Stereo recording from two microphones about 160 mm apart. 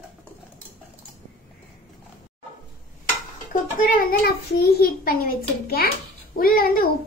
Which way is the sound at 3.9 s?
75° left (ahead or behind).